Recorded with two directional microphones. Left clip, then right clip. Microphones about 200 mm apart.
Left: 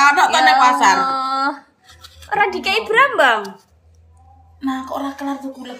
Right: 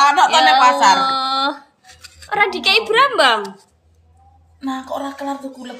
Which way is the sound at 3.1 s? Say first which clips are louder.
Even; 10° right (ahead or behind).